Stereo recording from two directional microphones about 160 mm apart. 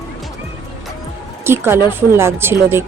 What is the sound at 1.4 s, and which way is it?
A woman's voice, 15° right (ahead or behind).